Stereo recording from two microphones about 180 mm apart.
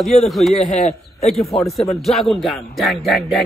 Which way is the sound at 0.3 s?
Centre (ahead or behind).